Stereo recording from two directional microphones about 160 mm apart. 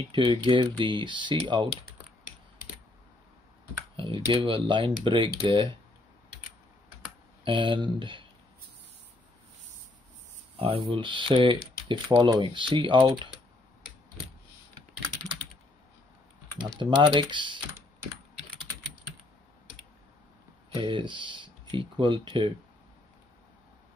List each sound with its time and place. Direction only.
0.1 s speech: 35° right (ahead or behind)
3.9 s speech: 35° right (ahead or behind)
7.4 s speech: 30° right (ahead or behind)
10.6 s speech: 35° right (ahead or behind)
16.8 s speech: 30° right (ahead or behind)
20.7 s speech: 30° right (ahead or behind)